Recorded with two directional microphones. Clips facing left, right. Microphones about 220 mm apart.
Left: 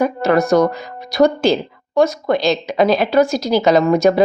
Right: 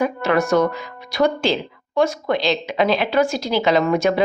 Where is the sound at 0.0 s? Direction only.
40° left (ahead or behind).